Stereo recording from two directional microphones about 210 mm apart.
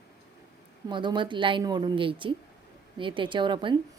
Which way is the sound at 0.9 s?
20° right (ahead or behind).